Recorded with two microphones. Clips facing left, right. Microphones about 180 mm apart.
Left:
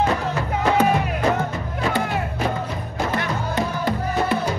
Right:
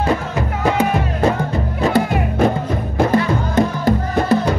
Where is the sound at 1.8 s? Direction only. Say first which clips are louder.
Right 6 dB; 40° right (ahead or behind).